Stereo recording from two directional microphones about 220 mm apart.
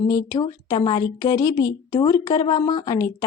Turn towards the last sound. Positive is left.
turn(degrees=15)  # may be behind; listen again after turning